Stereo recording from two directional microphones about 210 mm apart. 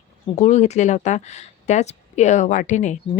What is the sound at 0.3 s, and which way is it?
Speech, 35° left (ahead or behind).